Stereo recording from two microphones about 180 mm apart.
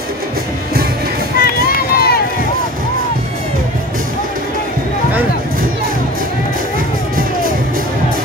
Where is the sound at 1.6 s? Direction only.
55° left (ahead or behind).